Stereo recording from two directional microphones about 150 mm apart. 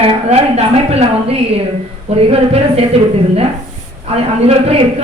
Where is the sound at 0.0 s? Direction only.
45° right (ahead or behind).